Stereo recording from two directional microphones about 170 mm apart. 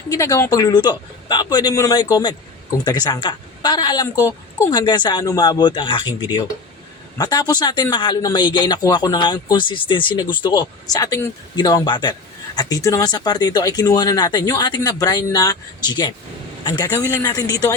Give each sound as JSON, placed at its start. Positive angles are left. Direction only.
{"t": 0.1, "sound": "speech", "side_deg": 20}